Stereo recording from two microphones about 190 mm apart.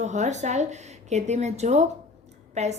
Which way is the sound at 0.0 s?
40° right (ahead or behind).